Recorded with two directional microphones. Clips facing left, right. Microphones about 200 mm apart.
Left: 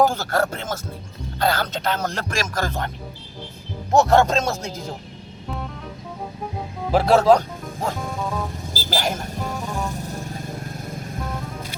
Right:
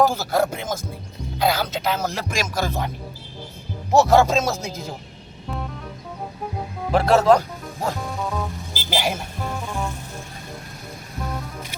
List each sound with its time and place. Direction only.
0.0 s a man's voice: 5° right (ahead or behind)
3.9 s speech: 5° right (ahead or behind)
6.9 s speech: centre (ahead or behind)
9.0 s a man's voice: 5° right (ahead or behind)
9.6 s vehicle: 40° left (ahead or behind)